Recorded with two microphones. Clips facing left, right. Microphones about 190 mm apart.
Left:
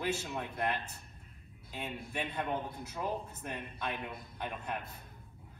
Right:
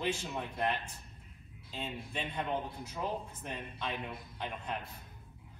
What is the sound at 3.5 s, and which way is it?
Speech, 55° left (ahead or behind).